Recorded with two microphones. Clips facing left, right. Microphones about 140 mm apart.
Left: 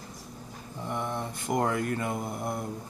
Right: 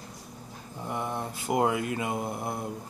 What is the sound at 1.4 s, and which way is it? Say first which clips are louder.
Speech: right 2 dB; 10° right (ahead or behind).